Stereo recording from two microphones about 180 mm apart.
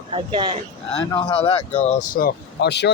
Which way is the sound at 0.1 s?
30° right (ahead or behind).